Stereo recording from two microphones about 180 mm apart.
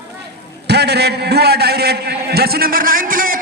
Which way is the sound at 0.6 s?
65° right (ahead or behind).